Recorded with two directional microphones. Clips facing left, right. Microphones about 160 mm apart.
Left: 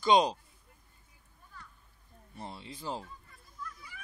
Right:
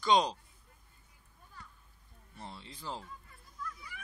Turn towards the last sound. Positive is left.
turn(degrees=15)  # may be behind; listen again after turning